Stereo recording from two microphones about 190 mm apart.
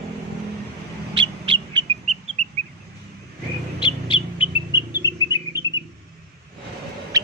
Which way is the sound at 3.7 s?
25° left (ahead or behind).